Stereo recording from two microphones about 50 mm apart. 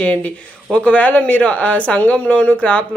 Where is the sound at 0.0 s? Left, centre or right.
Left.